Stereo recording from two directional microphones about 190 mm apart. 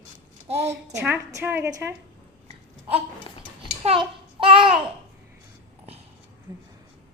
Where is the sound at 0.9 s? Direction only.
15° right (ahead or behind).